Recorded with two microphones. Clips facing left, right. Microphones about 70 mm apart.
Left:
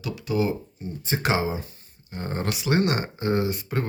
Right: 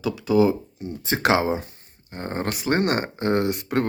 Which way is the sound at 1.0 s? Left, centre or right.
Right.